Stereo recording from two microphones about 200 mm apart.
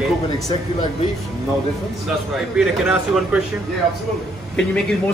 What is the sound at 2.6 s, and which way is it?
Speech, centre (ahead or behind).